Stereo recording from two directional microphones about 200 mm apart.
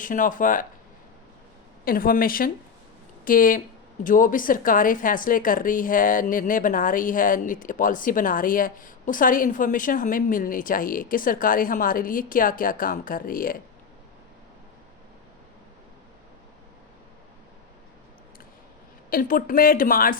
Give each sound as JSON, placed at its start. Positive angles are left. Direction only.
{"t": 0.0, "sound": "speech", "side_deg": 40}
{"t": 1.8, "sound": "a woman's voice", "side_deg": 45}
{"t": 19.1, "sound": "a woman's voice", "side_deg": 45}